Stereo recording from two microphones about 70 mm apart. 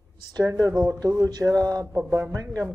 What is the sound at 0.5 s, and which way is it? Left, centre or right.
Speech, right.